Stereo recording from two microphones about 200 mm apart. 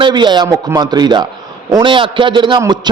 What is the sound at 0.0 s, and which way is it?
A man's voice, 20° right (ahead or behind).